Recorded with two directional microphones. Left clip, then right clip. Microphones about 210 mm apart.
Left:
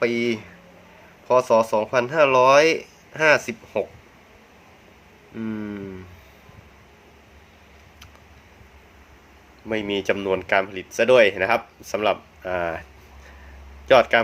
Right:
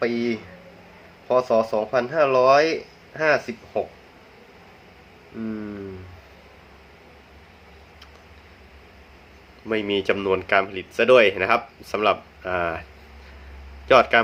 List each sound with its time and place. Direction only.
0.0 s speech: 30° left (ahead or behind)
5.4 s speech: 35° left (ahead or behind)
9.6 s speech: 10° left (ahead or behind)
13.8 s speech: 10° left (ahead or behind)